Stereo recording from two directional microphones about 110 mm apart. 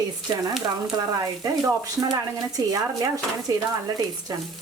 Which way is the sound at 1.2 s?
30° right (ahead or behind).